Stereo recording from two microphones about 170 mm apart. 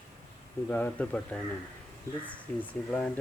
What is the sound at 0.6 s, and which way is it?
Speech, 10° left (ahead or behind).